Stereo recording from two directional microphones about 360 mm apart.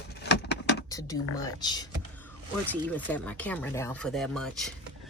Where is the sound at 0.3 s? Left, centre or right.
Left.